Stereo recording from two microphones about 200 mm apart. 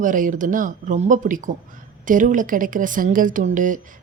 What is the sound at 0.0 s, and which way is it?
A woman's voice, 40° right (ahead or behind).